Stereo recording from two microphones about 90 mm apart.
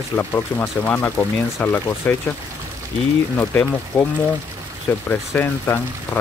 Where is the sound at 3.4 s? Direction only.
20° left (ahead or behind).